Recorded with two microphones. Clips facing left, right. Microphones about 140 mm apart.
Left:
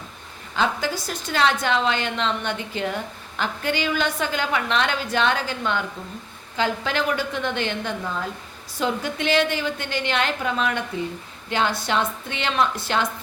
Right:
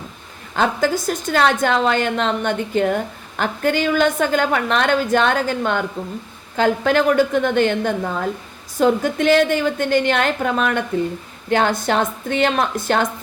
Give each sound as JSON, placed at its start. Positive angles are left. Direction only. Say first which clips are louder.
{"t": 0.5, "sound": "a woman's voice", "louder": "right 6 dB", "side_deg": -50}